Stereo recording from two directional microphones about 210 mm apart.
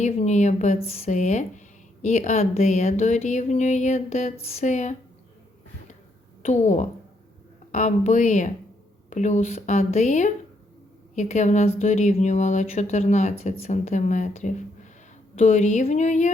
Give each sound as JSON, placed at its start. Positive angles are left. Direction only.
{"t": 0.0, "sound": "speech", "side_deg": 35}
{"t": 6.4, "sound": "speech", "side_deg": 35}